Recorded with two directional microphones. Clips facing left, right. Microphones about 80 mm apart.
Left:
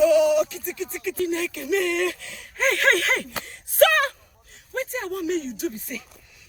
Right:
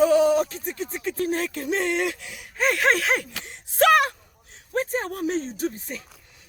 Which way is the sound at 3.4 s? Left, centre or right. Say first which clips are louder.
Left 3 dB; right.